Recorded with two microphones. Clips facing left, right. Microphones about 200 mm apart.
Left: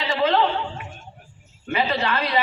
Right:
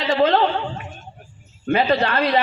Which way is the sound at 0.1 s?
45° right (ahead or behind).